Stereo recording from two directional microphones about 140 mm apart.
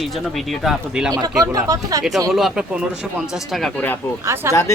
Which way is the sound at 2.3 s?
5° right (ahead or behind).